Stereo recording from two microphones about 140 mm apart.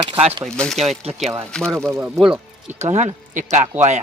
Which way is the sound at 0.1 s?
45° right (ahead or behind).